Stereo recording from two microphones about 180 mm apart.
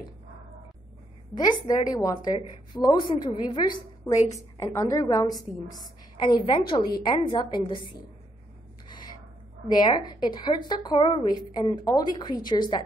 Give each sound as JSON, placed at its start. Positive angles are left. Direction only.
{"t": 1.3, "sound": "a woman's voice", "side_deg": 25}
{"t": 8.8, "sound": "gasp", "side_deg": 25}
{"t": 9.8, "sound": "a woman's voice", "side_deg": 25}